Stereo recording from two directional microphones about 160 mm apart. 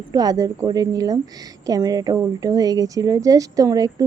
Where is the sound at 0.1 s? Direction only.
25° right (ahead or behind).